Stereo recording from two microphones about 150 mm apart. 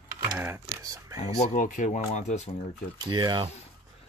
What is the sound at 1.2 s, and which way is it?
Speech, 55° left (ahead or behind).